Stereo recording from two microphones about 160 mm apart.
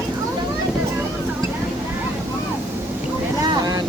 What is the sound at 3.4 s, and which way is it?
Vehicle, 25° right (ahead or behind).